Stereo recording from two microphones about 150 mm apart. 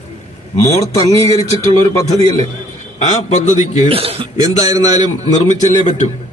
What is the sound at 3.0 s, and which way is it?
Speech, 50° left (ahead or behind).